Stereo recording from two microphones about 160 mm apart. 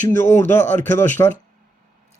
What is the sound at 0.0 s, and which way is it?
Speech, 15° left (ahead or behind).